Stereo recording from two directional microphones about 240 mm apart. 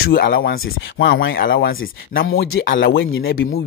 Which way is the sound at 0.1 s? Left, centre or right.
Left.